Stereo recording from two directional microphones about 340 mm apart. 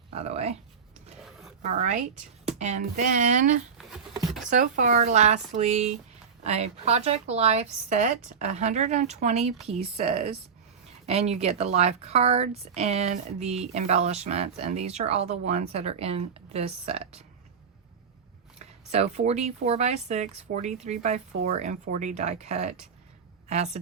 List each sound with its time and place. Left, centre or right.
0.1 s speech: centre
1.2 s a sound: centre
1.6 s speech: right
3.8 s a sound: centre
4.4 s speech: right
18.6 s speech: centre